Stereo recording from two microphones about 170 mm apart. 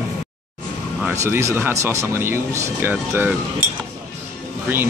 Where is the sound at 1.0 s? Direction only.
15° right (ahead or behind).